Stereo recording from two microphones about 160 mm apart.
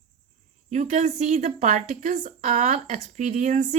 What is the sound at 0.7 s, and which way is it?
A woman's voice, 50° right (ahead or behind).